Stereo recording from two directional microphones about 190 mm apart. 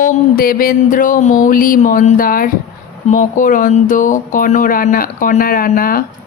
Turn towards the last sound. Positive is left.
turn(degrees=50)  # may be behind; listen again after turning